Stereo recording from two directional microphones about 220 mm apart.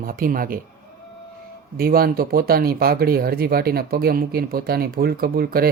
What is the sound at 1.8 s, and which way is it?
Speech, 45° right (ahead or behind).